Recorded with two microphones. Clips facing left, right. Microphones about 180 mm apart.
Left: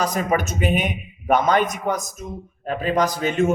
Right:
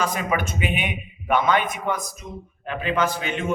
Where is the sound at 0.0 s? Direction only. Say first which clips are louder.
Left 3 dB; 40° left (ahead or behind).